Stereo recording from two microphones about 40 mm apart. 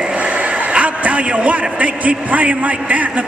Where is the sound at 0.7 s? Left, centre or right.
Right.